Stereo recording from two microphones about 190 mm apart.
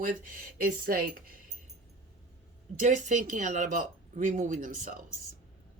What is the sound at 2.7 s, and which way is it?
Speech, 40° right (ahead or behind).